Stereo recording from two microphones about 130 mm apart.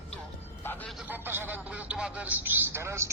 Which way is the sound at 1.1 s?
15° right (ahead or behind).